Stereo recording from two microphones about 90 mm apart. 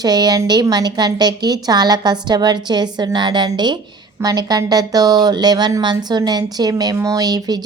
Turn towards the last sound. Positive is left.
turn(degrees=-45)  # may be behind; listen again after turning